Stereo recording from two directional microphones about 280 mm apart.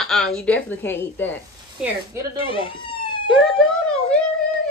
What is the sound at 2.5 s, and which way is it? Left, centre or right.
Speech, centre.